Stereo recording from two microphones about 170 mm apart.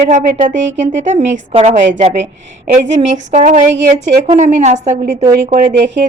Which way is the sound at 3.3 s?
45° right (ahead or behind).